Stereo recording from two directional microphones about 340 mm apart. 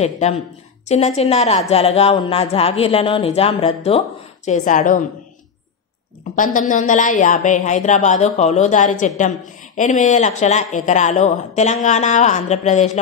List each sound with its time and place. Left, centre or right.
0.0 s speech: centre
6.3 s speech: left